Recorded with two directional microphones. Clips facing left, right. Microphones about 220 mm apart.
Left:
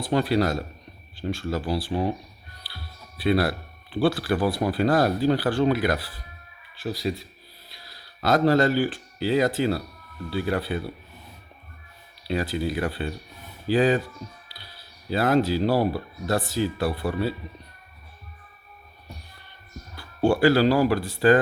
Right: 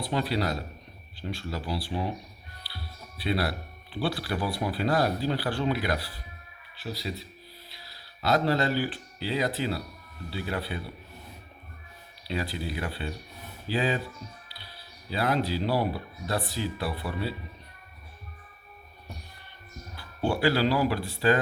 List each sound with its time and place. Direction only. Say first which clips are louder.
0.0 s speech: left 6 dB; 50° left (ahead or behind)
3.2 s speech: left 6 dB; 50° left (ahead or behind)
8.2 s speech: left 6 dB; 45° left (ahead or behind)
12.3 s speech: left 6 dB; 45° left (ahead or behind)
20.2 s speech: left 6 dB; 45° left (ahead or behind)